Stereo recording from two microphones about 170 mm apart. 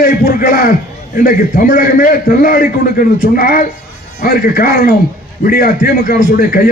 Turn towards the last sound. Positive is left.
turn(degrees=55)  # may be behind; listen again after turning